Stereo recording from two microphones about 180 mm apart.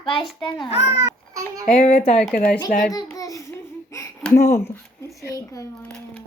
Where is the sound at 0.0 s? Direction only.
30° left (ahead or behind).